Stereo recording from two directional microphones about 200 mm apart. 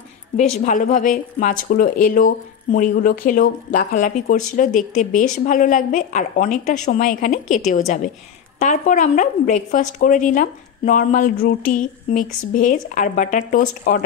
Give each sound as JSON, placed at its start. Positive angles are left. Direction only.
{"t": 0.4, "sound": "a woman's voice", "side_deg": 35}